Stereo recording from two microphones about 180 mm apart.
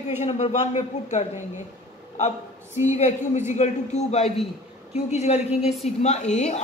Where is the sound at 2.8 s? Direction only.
40° left (ahead or behind).